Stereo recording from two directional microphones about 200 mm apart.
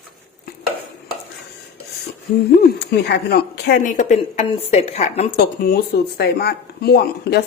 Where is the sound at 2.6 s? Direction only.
55° left (ahead or behind).